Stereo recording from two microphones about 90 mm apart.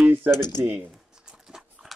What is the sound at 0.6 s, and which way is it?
Speech, 20° right (ahead or behind).